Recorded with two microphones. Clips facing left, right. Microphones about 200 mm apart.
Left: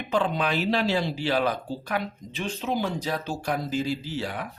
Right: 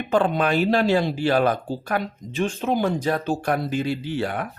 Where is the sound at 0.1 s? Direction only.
50° right (ahead or behind).